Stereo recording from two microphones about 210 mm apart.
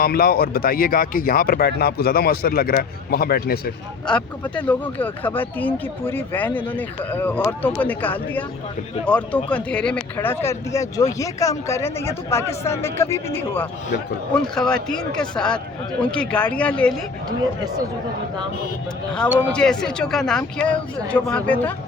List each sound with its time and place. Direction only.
0.0 s speech: 45° left (ahead or behind)
4.0 s speech: 5° left (ahead or behind)
17.2 s speech: 20° right (ahead or behind)
19.5 s speech: 5° left (ahead or behind)